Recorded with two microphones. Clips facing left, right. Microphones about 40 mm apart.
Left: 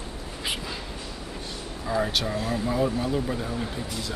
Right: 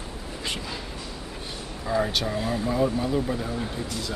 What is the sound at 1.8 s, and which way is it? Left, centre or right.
Vehicle, centre.